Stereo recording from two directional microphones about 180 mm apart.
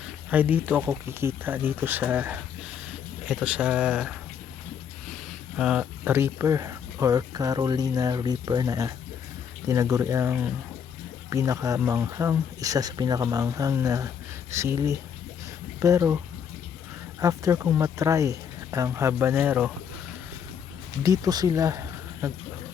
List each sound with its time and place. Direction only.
0.3 s speech: 10° right (ahead or behind)
5.5 s speech: 5° right (ahead or behind)
17.2 s speech: 20° right (ahead or behind)
21.0 s speech: 20° right (ahead or behind)